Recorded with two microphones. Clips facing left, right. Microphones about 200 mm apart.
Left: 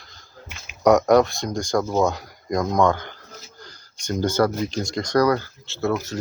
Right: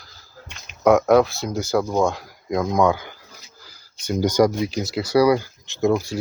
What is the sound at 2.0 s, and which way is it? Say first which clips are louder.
Speech: even; centre (ahead or behind).